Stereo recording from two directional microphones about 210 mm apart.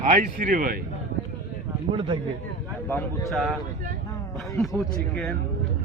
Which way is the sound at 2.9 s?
Centre (ahead or behind).